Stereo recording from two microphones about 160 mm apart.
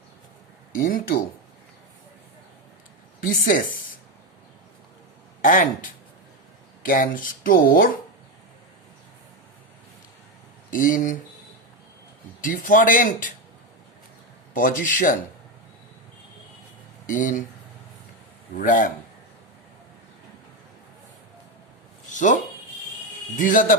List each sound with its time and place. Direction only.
0.7 s speech: 60° left (ahead or behind)
3.2 s speech: 60° left (ahead or behind)
5.4 s speech: 55° left (ahead or behind)
6.8 s speech: 60° left (ahead or behind)
10.7 s speech: 60° left (ahead or behind)
12.4 s speech: 55° left (ahead or behind)
14.5 s speech: 55° left (ahead or behind)
17.2 s speech: 55° left (ahead or behind)
18.5 s speech: 60° left (ahead or behind)
22.1 s a sound: 50° left (ahead or behind)
23.3 s speech: 55° left (ahead or behind)